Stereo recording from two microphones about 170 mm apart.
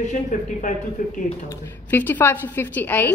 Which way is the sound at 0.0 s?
45° left (ahead or behind).